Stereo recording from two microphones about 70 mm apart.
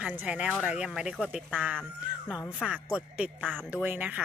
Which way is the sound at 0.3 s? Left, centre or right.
Centre.